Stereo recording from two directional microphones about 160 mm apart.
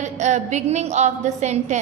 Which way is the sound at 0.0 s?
45° right (ahead or behind).